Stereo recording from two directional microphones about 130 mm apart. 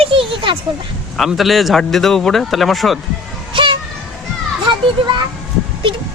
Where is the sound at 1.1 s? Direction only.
Centre (ahead or behind).